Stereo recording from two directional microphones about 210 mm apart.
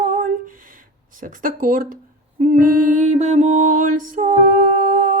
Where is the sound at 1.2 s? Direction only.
40° right (ahead or behind).